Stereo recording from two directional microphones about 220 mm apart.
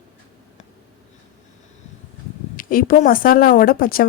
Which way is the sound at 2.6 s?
40° left (ahead or behind).